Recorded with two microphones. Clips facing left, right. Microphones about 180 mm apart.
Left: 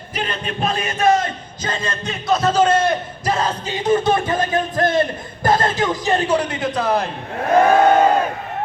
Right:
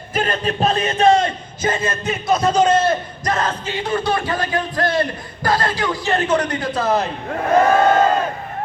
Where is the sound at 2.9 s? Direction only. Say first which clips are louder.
Even; 10° left (ahead or behind).